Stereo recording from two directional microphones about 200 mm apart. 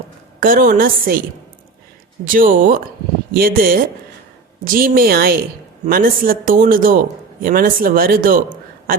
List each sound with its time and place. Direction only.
0.3 s a man's voice: 45° right (ahead or behind)
2.2 s a man's voice: 45° right (ahead or behind)